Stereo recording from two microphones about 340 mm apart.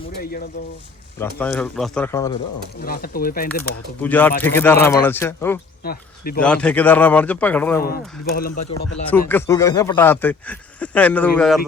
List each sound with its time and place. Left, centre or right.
1.2 s speech: centre
2.8 s speech: left
3.5 s speech: centre
5.8 s speech: left
6.4 s speech: centre
7.8 s speech: left
9.0 s speech: centre